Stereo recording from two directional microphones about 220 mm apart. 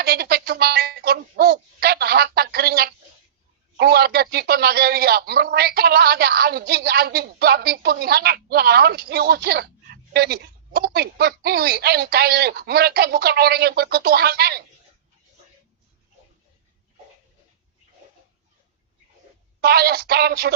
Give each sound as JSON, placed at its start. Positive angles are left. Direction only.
{"t": 0.0, "sound": "a man's voice", "side_deg": -45}
{"t": 19.6, "sound": "a man's voice", "side_deg": -45}